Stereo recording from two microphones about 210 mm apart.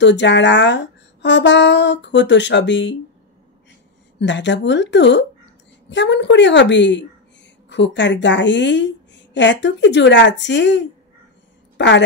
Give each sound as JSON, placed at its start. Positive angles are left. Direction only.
{"t": 0.0, "sound": "a woman's voice", "side_deg": 55}
{"t": 4.2, "sound": "a woman's voice", "side_deg": 60}
{"t": 11.7, "sound": "a sound", "side_deg": 60}